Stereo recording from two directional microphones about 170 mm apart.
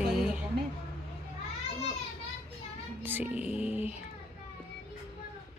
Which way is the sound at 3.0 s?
10° right (ahead or behind).